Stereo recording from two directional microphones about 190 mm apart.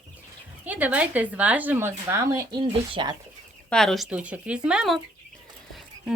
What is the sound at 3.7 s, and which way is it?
Speech, centre (ahead or behind).